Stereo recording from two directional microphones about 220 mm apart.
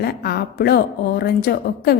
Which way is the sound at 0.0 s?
45° left (ahead or behind).